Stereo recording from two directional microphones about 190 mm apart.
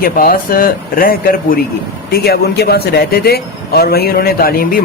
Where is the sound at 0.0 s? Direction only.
50° left (ahead or behind).